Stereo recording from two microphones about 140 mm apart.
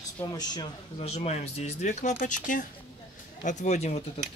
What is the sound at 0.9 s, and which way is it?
Speech, 45° left (ahead or behind).